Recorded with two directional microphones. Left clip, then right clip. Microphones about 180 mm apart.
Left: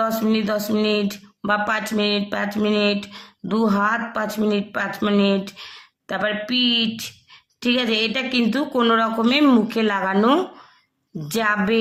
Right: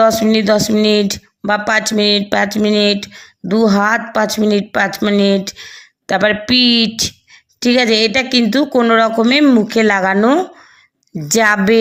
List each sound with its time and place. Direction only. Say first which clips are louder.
0.0 s speech: right 10 dB; 30° right (ahead or behind)
9.4 s speech: right 3 dB; 15° right (ahead or behind)
9.6 s speech: right 8 dB; 30° right (ahead or behind)
11.3 s speech: right 9 dB; 30° right (ahead or behind)